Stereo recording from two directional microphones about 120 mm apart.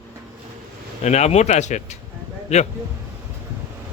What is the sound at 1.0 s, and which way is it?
Speech, 65° left (ahead or behind).